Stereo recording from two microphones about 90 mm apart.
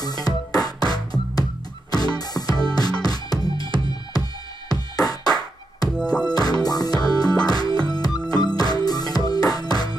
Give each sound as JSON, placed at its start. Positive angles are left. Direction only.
{"t": 0.0, "sound": "music", "side_deg": 45}
{"t": 5.9, "sound": "music", "side_deg": 10}
{"t": 6.3, "sound": "music", "side_deg": 50}